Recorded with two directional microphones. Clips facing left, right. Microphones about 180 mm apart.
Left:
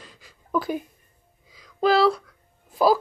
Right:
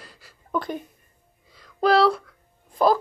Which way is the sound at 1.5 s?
Centre (ahead or behind).